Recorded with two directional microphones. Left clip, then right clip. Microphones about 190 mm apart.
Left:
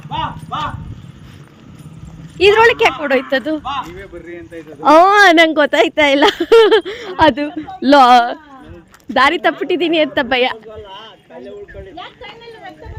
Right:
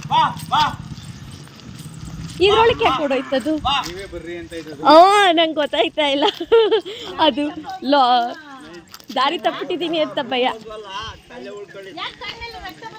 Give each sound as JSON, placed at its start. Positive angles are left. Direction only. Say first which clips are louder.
{"t": 0.1, "sound": "clip-clop", "louder": "right 5 dB", "side_deg": -45}
{"t": 2.4, "sound": "speech", "louder": "left 5 dB", "side_deg": 55}
{"t": 3.6, "sound": "speech", "louder": "right 2 dB", "side_deg": -25}
{"t": 4.1, "sound": "speech", "louder": "right 1 dB", "side_deg": -50}
{"t": 4.8, "sound": "speech", "louder": "left 2 dB", "side_deg": 15}
{"t": 5.2, "sound": "speech", "louder": "left 7 dB", "side_deg": 45}
{"t": 7.8, "sound": "speech", "louder": "left 7 dB", "side_deg": 60}